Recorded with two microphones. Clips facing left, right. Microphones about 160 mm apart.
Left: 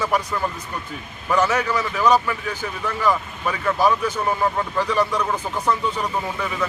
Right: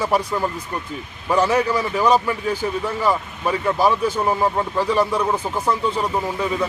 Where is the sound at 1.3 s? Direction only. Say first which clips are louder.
Right 2 dB; 30° right (ahead or behind).